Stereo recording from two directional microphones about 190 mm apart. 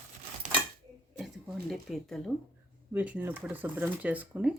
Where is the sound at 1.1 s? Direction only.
Centre (ahead or behind).